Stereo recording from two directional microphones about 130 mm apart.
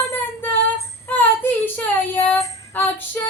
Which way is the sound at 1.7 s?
15° left (ahead or behind).